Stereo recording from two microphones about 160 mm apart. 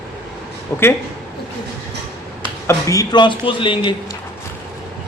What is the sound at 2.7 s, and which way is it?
A man's voice, 20° left (ahead or behind).